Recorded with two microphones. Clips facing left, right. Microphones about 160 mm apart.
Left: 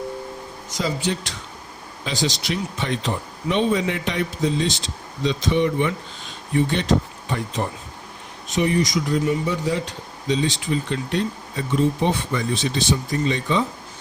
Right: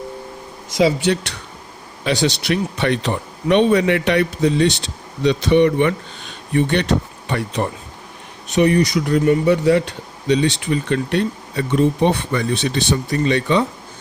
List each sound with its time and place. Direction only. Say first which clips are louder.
0.7 s speech: right 8 dB; 75° right (ahead or behind)